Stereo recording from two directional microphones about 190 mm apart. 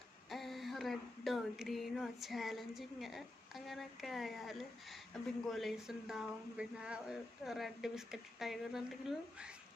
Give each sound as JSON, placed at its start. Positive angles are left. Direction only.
{"t": 0.3, "sound": "speech", "side_deg": 0}